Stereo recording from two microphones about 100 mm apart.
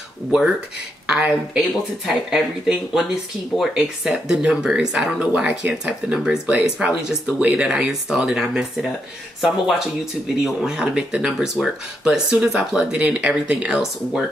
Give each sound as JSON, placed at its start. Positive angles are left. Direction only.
{"t": 1.0, "sound": "speech", "side_deg": -5}